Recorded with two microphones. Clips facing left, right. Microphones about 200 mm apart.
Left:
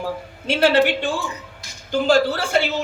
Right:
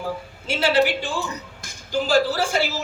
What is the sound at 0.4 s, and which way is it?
Speech, 60° left (ahead or behind).